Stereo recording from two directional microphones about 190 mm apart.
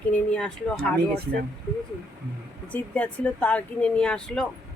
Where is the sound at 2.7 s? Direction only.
5° left (ahead or behind).